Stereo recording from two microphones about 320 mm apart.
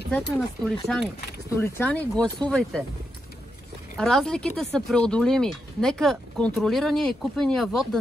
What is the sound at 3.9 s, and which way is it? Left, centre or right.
Speech, centre.